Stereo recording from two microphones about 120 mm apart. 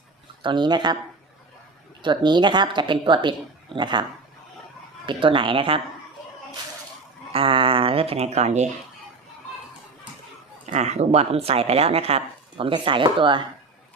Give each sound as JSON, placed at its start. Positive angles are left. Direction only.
{"t": 0.4, "sound": "speech", "side_deg": -40}
{"t": 2.0, "sound": "speech", "side_deg": -40}
{"t": 5.0, "sound": "a woman's voice", "side_deg": -45}
{"t": 7.3, "sound": "speech", "side_deg": -50}
{"t": 10.7, "sound": "speech", "side_deg": -70}